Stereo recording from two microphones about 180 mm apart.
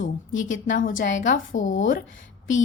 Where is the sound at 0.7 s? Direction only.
50° left (ahead or behind).